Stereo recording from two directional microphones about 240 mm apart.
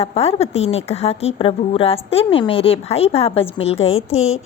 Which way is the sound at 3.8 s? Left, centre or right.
Left.